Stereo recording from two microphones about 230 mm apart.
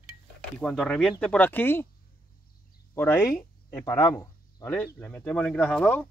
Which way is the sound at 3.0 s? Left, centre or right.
Centre.